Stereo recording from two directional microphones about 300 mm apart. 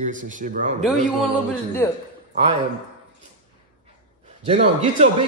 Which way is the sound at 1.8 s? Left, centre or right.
Centre.